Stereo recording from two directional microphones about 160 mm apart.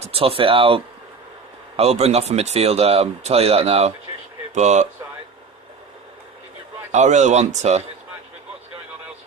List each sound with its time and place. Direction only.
0.0 s speech: 35° right (ahead or behind)
6.9 s speech: 45° right (ahead or behind)